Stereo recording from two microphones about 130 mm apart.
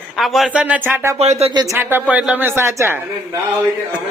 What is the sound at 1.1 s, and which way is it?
Speech, 55° right (ahead or behind).